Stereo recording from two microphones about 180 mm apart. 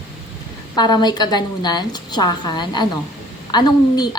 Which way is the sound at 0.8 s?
25° left (ahead or behind).